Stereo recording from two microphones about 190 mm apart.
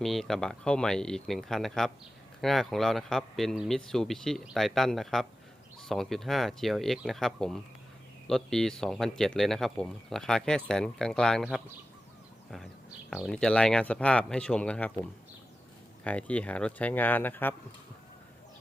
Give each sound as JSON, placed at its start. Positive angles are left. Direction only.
{"t": 0.0, "sound": "speech", "side_deg": 0}
{"t": 13.1, "sound": "speech", "side_deg": 0}
{"t": 16.0, "sound": "speech", "side_deg": 5}